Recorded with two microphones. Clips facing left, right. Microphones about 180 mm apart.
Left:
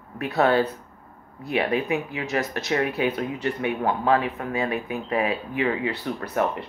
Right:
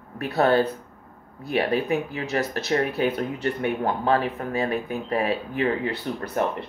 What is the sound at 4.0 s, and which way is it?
Speech, 35° right (ahead or behind).